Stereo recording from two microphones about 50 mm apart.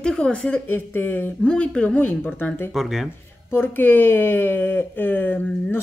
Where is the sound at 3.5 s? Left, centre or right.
Left.